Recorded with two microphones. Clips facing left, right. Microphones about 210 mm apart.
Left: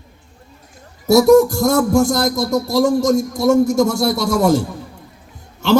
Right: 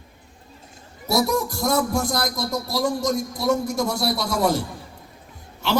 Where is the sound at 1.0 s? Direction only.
50° left (ahead or behind).